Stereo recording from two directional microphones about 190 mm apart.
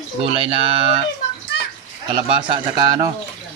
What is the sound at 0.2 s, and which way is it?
Speech, 30° right (ahead or behind).